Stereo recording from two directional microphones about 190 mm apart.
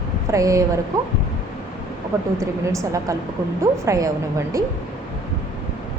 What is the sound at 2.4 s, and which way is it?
A woman's voice, 15° right (ahead or behind).